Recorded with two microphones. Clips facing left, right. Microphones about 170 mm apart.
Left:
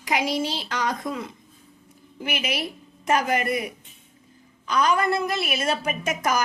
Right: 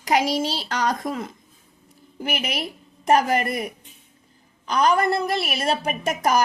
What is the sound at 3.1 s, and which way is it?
Speech, 35° right (ahead or behind).